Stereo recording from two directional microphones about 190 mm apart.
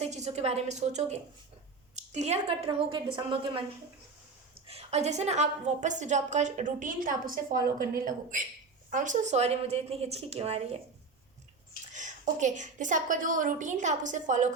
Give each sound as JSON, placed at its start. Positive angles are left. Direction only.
{"t": 0.0, "sound": "a woman's voice", "side_deg": -35}
{"t": 4.7, "sound": "a woman's voice", "side_deg": -35}
{"t": 11.9, "sound": "a woman's voice", "side_deg": -40}